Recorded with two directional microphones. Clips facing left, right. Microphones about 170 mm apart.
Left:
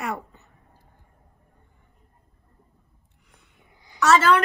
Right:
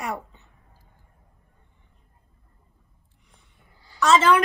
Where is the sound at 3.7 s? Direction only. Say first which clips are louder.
Left 1 dB; 20° left (ahead or behind).